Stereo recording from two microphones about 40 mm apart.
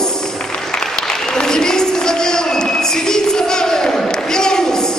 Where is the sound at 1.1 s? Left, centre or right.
Centre.